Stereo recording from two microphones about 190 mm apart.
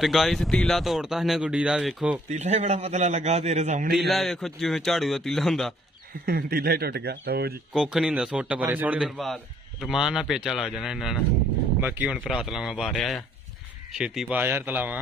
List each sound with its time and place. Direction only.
0.0 s a man's voice: centre (ahead or behind)
2.3 s a man's voice: 35° right (ahead or behind)
3.9 s a man's voice: centre (ahead or behind)
6.2 s speech: 50° right (ahead or behind)
7.7 s a man's voice: 5° right (ahead or behind)